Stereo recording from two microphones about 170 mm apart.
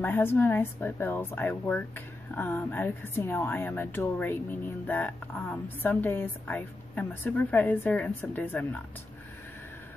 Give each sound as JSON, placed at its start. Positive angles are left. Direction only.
{"t": 0.0, "sound": "speech", "side_deg": 10}